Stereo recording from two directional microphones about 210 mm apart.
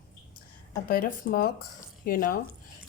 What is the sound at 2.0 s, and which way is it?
Speech, 45° left (ahead or behind).